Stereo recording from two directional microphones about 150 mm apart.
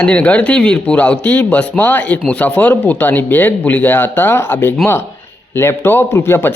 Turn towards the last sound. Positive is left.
turn(degrees=15)  # may be behind; listen again after turning